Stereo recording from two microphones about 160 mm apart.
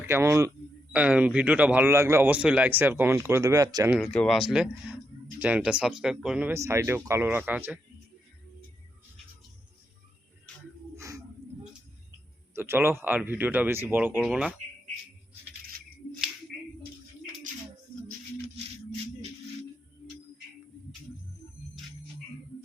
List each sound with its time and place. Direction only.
0.0 s speech: 15° right (ahead or behind)
4.0 s speech: 5° left (ahead or behind)
6.5 s speech: 20° right (ahead or behind)
10.9 s a sound: 20° right (ahead or behind)
12.5 s speech: 15° right (ahead or behind)